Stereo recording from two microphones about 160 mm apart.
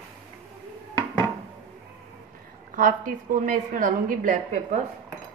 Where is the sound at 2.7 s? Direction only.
60° right (ahead or behind).